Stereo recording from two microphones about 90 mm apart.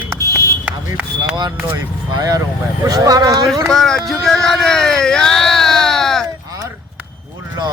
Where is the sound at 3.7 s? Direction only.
5° left (ahead or behind).